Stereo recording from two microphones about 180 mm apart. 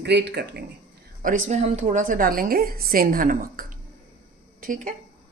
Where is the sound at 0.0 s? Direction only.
65° right (ahead or behind).